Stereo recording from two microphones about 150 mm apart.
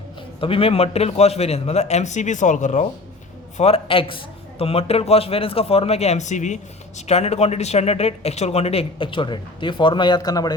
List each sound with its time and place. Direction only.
0.3 s a man's voice: 35° left (ahead or behind); by 2.8 s 55° left (ahead or behind)
3.6 s speech: 40° left (ahead or behind)